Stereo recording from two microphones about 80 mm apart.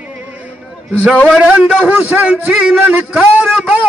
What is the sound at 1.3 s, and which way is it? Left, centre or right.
A man's voice, centre.